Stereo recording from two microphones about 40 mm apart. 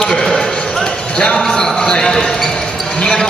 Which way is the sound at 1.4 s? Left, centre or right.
Centre.